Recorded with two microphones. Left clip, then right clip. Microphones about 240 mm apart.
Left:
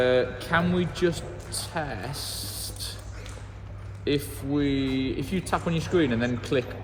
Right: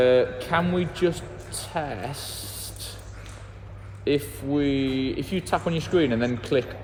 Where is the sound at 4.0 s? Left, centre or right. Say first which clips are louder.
Right 3 dB; right.